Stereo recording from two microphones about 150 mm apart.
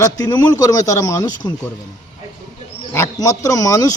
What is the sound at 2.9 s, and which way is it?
Speech, 20° left (ahead or behind).